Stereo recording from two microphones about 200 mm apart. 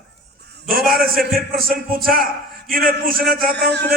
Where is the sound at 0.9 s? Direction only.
50° right (ahead or behind).